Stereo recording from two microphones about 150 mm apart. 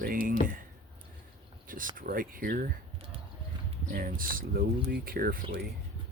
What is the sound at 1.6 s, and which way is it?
Speech, 65° right (ahead or behind).